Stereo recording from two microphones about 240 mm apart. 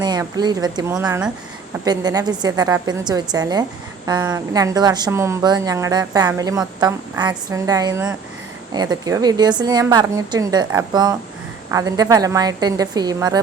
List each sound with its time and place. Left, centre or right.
0.0 s a woman's voice: centre